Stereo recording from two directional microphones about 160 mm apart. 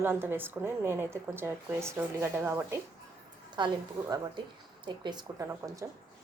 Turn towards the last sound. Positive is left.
turn(degrees=-20)  # may be behind; listen again after turning